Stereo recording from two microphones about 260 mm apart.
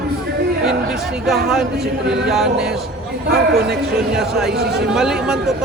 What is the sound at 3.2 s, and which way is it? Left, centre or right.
Speech, right.